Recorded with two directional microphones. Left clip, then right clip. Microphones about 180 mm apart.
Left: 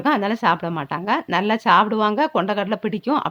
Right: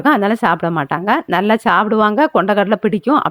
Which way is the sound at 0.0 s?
30° right (ahead or behind).